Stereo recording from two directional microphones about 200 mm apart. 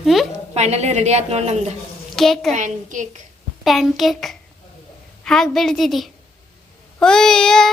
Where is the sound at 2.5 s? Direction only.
40° right (ahead or behind).